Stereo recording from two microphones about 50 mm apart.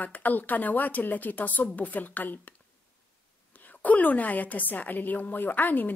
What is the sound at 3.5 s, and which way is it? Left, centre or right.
Speech, left.